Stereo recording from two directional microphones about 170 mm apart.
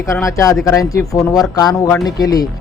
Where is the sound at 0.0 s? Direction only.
20° left (ahead or behind).